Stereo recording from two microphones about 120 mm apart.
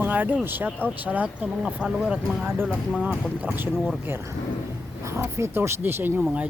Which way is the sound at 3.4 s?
15° right (ahead or behind).